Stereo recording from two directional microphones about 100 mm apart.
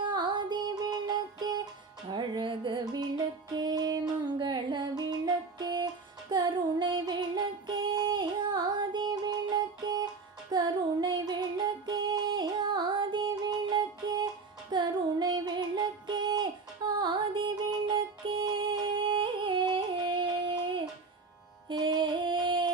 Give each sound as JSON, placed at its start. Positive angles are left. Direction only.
{"t": 0.0, "sound": "music", "side_deg": -50}